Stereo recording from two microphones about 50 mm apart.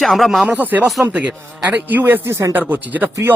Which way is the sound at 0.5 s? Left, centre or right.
Right.